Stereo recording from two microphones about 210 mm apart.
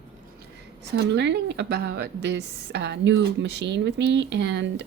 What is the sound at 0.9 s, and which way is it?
A woman's voice, 55° right (ahead or behind).